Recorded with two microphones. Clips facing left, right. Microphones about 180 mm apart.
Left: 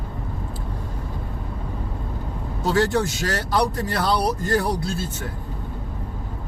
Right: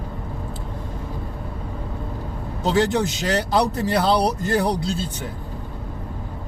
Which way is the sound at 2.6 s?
20° right (ahead or behind).